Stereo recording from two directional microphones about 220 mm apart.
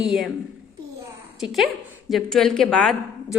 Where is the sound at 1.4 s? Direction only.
Centre (ahead or behind).